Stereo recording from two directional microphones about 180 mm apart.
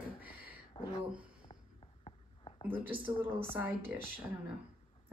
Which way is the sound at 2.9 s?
30° right (ahead or behind).